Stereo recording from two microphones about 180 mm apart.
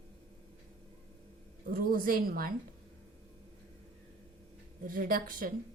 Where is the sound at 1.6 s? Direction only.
55° right (ahead or behind).